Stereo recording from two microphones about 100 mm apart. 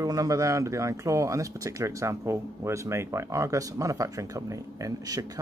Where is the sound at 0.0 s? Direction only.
35° right (ahead or behind).